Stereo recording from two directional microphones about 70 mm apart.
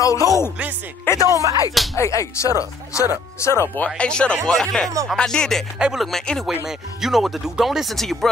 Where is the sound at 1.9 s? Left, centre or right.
Left.